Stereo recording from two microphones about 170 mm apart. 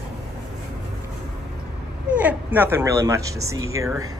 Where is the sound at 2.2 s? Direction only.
10° right (ahead or behind).